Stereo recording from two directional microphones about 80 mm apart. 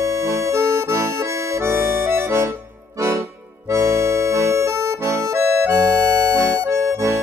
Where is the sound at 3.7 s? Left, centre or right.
Right.